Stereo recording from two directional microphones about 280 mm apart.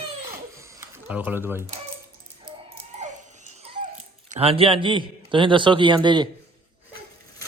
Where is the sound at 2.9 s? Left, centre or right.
Right.